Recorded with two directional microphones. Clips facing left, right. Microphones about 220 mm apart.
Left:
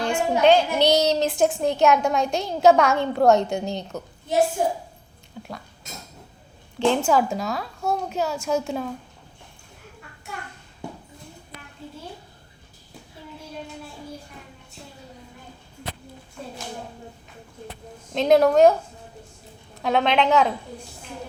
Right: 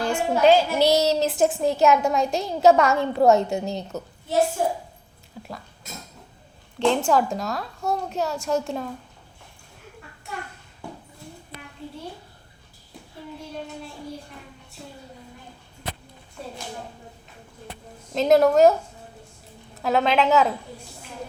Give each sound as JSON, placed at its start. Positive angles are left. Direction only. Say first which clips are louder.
{"t": 0.0, "sound": "a woman's voice", "louder": "even", "side_deg": -5}
{"t": 4.6, "sound": "a woman's voice", "louder": "left 1 dB", "side_deg": 15}
{"t": 5.4, "sound": "a woman's voice", "louder": "left 1 dB", "side_deg": 0}
{"t": 6.7, "sound": "a woman's voice", "louder": "even", "side_deg": 0}
{"t": 18.1, "sound": "a woman's voice", "louder": "even", "side_deg": 0}